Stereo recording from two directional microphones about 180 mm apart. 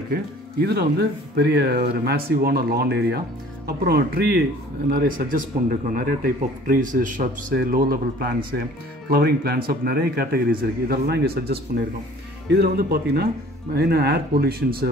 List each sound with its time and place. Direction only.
0.1 s speech: 60° right (ahead or behind)
4.8 s speech: 50° right (ahead or behind)